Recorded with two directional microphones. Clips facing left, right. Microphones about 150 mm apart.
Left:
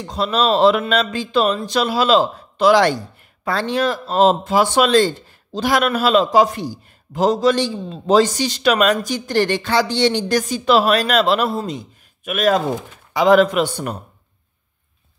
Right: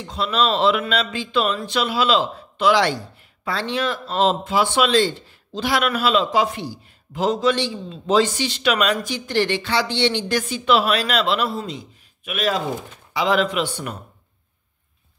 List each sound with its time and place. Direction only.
0.0 s speech: 40° left (ahead or behind)